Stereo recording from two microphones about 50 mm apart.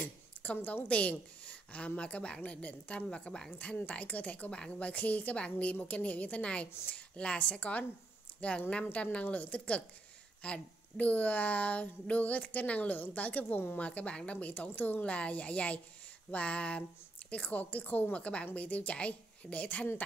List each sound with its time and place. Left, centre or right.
0.0 s a sound: left
0.8 s speech: left
3.4 s a woman's voice: left
6.4 s a woman's voice: left